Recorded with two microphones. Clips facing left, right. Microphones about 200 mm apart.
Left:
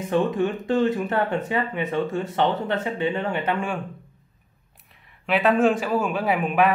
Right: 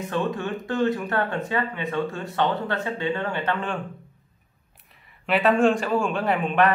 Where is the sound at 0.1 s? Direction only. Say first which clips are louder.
Left 6 dB; 20° left (ahead or behind).